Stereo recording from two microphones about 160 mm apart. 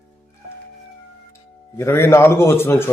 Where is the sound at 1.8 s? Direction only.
15° left (ahead or behind).